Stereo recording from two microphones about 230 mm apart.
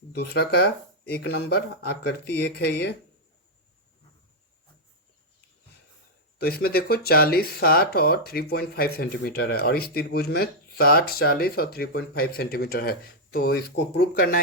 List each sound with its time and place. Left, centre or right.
0.1 s speech: left
6.4 s speech: left